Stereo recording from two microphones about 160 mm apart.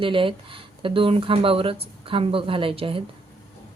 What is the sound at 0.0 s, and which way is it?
Speech, 35° right (ahead or behind).